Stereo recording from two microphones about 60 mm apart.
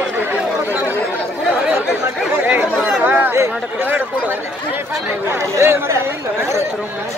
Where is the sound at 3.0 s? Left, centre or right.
Right.